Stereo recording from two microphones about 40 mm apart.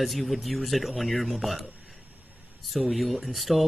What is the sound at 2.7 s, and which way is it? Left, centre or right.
Speech, centre.